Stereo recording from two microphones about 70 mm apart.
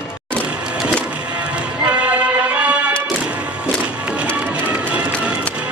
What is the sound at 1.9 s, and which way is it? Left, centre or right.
Music, centre.